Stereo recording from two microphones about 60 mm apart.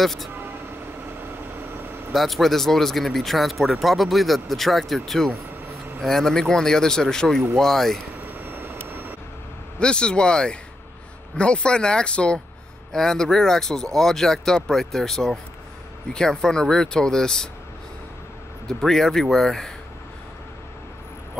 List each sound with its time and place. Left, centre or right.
0.0 s speech: centre
2.1 s a man's voice: centre
8.4 s vehicle: right
9.8 s a man's voice: centre
18.7 s a man's voice: centre